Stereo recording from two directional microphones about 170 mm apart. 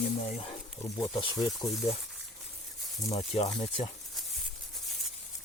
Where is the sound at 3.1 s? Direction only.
35° left (ahead or behind).